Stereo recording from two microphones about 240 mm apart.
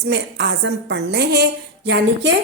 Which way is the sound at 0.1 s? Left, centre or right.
Right.